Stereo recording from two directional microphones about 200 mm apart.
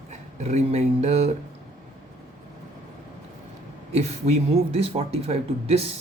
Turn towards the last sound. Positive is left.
turn(degrees=-30)  # may be behind; listen again after turning